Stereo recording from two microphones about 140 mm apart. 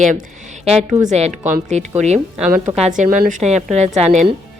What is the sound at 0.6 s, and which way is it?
A woman's voice, 50° right (ahead or behind).